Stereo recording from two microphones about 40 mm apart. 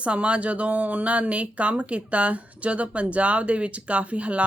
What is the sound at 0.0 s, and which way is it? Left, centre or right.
Speech, right.